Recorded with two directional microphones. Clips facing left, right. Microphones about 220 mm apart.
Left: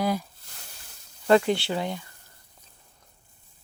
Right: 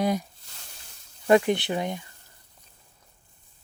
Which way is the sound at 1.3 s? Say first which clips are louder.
Even; 20° right (ahead or behind).